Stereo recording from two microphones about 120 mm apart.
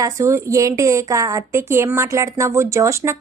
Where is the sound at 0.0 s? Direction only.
25° right (ahead or behind).